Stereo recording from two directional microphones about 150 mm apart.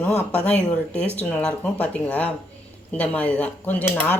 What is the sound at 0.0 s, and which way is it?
Speech, 10° left (ahead or behind).